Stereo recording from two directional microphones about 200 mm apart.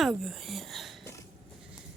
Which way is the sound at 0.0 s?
Centre (ahead or behind).